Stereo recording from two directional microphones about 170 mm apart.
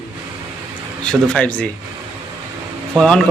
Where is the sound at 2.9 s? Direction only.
5° left (ahead or behind).